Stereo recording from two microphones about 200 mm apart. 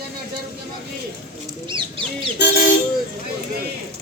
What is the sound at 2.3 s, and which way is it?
Vehicle, 55° left (ahead or behind).